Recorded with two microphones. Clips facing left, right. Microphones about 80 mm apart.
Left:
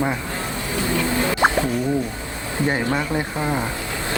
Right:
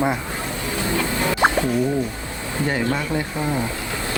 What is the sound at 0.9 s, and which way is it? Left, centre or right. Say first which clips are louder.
Music: left 1 dB; left.